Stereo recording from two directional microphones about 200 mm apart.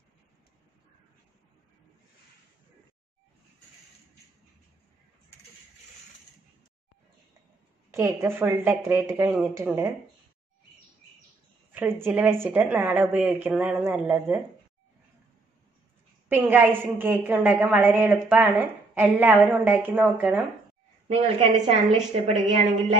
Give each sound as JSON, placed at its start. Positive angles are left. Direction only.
{"t": 7.9, "sound": "a woman's voice", "side_deg": -15}
{"t": 11.7, "sound": "a woman's voice", "side_deg": -10}
{"t": 16.3, "sound": "a woman's voice", "side_deg": -10}
{"t": 21.1, "sound": "a woman's voice", "side_deg": -30}